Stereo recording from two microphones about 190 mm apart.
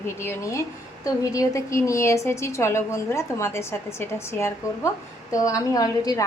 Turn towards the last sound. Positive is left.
turn(degrees=20)  # may be behind; listen again after turning